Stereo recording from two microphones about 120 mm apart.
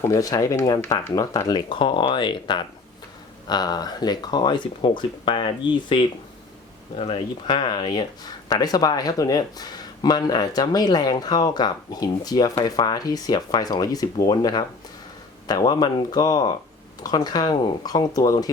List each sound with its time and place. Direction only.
0.0 s speech: 30° left (ahead or behind)